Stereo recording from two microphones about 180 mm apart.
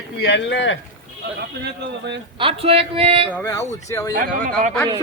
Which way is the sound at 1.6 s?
70° right (ahead or behind).